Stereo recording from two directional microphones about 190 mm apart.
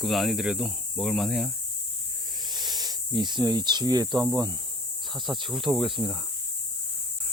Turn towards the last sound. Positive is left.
turn(degrees=0)  # may be behind; listen again after turning